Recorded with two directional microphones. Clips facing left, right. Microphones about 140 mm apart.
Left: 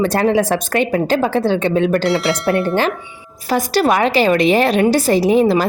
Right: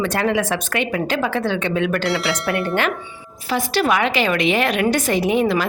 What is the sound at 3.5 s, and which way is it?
A woman's voice, 40° left (ahead or behind).